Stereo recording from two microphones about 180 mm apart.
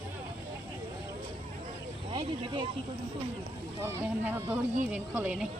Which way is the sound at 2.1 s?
25° right (ahead or behind).